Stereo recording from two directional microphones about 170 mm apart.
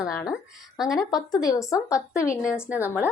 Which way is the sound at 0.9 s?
20° left (ahead or behind).